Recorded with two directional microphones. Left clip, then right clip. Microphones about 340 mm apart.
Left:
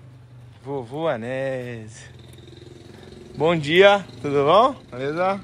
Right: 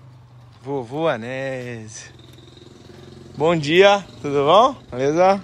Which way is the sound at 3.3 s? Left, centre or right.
Centre.